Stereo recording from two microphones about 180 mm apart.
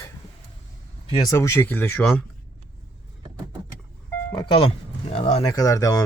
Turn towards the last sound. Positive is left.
turn(degrees=20)  # may be behind; listen again after turning